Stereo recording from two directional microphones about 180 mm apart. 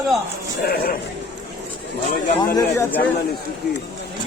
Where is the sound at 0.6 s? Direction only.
55° left (ahead or behind).